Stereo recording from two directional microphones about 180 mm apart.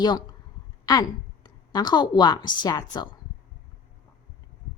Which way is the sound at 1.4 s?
25° left (ahead or behind).